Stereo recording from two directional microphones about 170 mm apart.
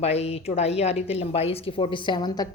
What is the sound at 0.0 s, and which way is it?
A woman's voice, 40° left (ahead or behind).